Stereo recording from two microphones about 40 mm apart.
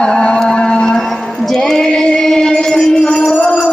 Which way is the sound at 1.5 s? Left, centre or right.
Centre.